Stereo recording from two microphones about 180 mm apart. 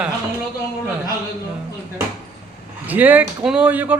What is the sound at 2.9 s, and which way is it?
Speech, 10° right (ahead or behind).